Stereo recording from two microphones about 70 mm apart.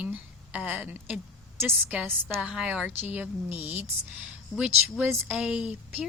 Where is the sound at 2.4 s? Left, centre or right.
Centre.